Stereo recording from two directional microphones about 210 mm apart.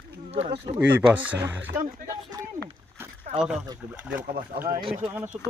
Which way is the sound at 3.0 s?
5° right (ahead or behind).